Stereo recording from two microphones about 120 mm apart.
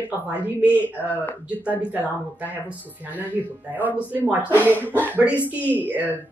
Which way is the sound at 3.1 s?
15° right (ahead or behind).